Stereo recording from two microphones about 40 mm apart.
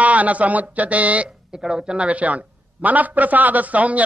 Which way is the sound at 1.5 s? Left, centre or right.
Centre.